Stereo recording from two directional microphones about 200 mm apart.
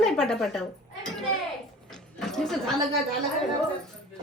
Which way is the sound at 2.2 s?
Centre (ahead or behind).